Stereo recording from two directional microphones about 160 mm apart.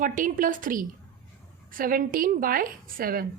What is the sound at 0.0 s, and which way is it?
A woman's voice, 55° right (ahead or behind).